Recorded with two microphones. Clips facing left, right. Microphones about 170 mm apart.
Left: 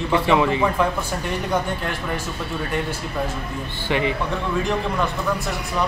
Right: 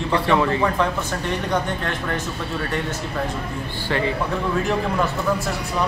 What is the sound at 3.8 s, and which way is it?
Speech, 15° left (ahead or behind).